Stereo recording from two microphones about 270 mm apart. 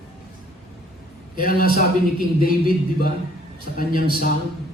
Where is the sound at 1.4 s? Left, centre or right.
Left.